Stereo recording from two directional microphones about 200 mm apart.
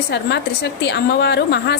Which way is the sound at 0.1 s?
60° left (ahead or behind).